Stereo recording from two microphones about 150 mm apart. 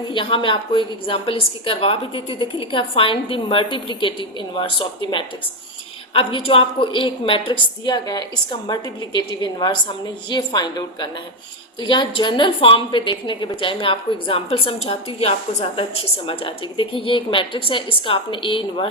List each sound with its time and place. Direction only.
0.1 s a woman's voice: 35° left (ahead or behind)